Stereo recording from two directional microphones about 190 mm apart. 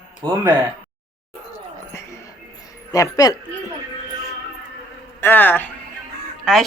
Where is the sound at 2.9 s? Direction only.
20° left (ahead or behind).